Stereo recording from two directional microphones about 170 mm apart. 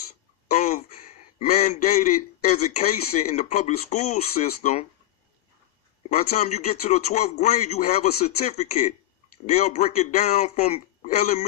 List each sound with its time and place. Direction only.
0.5 s a man's voice: 40° left (ahead or behind)
6.1 s a man's voice: 45° left (ahead or behind)